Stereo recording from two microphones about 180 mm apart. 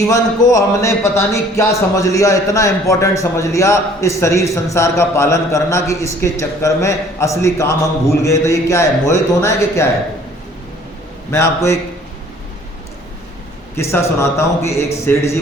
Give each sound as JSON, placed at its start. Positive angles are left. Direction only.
{"t": 0.1, "sound": "speech", "side_deg": 20}
{"t": 11.3, "sound": "speech", "side_deg": 15}
{"t": 13.7, "sound": "speech", "side_deg": 15}